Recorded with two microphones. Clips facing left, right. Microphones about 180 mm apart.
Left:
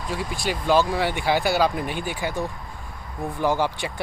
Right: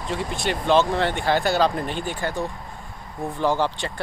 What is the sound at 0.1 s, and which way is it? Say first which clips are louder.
Speech: right 2 dB; 5° left (ahead or behind).